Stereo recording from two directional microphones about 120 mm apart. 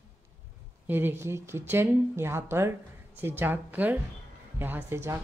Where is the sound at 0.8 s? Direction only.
20° right (ahead or behind).